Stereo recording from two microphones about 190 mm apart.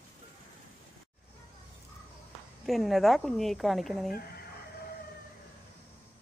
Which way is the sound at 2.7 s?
Centre (ahead or behind).